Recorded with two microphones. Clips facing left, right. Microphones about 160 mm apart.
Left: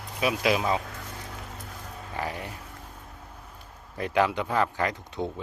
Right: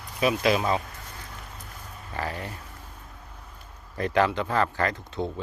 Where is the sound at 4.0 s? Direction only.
10° left (ahead or behind).